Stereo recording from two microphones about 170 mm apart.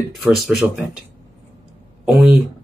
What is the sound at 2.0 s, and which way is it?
Speech, 5° right (ahead or behind).